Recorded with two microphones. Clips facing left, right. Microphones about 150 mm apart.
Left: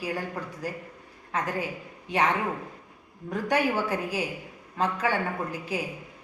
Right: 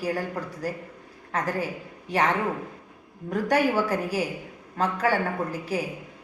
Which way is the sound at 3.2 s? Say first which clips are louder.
Right 3 dB; 40° right (ahead or behind).